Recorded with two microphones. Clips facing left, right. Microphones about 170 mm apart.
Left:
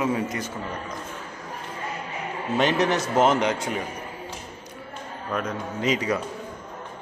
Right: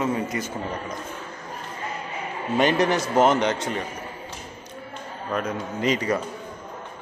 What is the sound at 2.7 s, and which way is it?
A man's voice, centre (ahead or behind).